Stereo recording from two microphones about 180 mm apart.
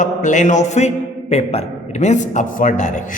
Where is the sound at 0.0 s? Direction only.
45° left (ahead or behind).